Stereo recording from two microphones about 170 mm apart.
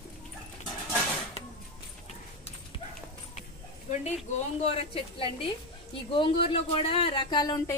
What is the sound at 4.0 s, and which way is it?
Speech, 40° left (ahead or behind).